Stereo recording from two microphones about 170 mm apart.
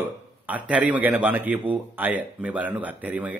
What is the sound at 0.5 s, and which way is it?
A man's voice, 10° right (ahead or behind).